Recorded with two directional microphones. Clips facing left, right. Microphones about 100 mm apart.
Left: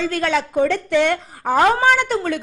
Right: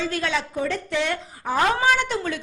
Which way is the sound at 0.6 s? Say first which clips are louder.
Left 10 dB; 75° left (ahead or behind).